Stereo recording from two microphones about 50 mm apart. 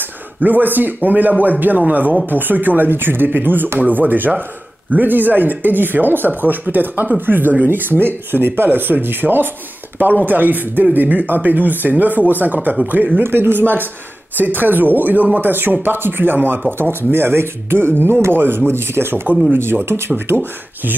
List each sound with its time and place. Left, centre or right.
0.4 s speech: right
13.2 s speech: right